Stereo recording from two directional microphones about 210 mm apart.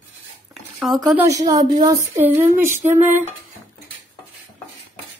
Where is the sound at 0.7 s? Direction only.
Centre (ahead or behind).